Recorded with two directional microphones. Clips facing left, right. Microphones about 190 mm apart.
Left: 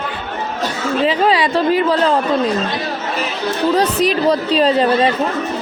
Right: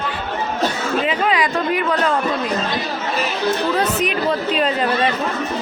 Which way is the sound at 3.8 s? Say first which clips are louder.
Left 4 dB; 35° left (ahead or behind).